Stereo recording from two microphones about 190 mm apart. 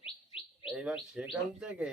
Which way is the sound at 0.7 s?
5° right (ahead or behind).